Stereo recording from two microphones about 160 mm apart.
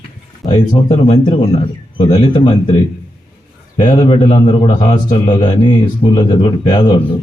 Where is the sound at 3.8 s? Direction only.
30° left (ahead or behind).